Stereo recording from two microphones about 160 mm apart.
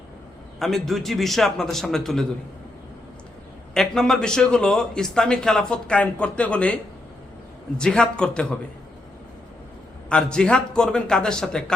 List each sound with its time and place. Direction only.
0.6 s speech: centre (ahead or behind)
3.8 s speech: 5° left (ahead or behind)
7.8 s speech: 5° left (ahead or behind)
10.1 s speech: 5° left (ahead or behind)